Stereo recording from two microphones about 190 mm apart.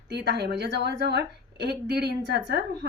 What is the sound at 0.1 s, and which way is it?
Speech, 60° right (ahead or behind).